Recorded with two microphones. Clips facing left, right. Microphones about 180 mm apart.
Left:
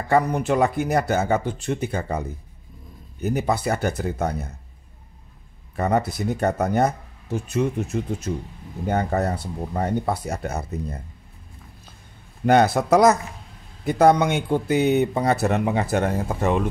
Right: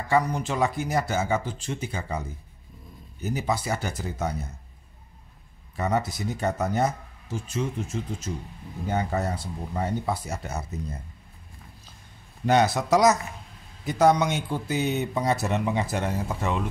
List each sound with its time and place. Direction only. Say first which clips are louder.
0.1 s speech: left 5 dB; 60° left (ahead or behind)
5.8 s speech: left 4 dB; 60° left (ahead or behind)
12.4 s speech: left 4 dB; 55° left (ahead or behind)